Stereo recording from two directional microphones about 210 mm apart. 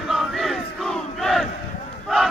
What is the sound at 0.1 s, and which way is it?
Crowd, centre (ahead or behind).